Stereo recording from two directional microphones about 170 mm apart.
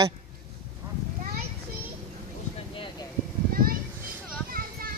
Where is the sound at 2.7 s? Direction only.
30° left (ahead or behind).